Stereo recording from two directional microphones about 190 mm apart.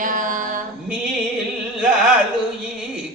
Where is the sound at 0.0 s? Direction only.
45° right (ahead or behind).